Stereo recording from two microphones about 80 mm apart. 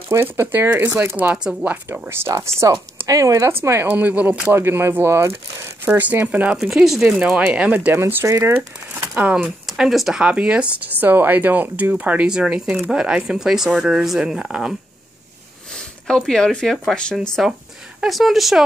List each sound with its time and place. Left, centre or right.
0.1 s speech: right; by 1.8 s centre
2.0 s speech: right; by 4.6 s centre
4.6 s speech: right
5.9 s speech: right
6.6 s speech: centre
7.9 s speech: right
9.1 s speech: centre
9.4 s speech: centre
15.7 s speech: centre
18.0 s speech: centre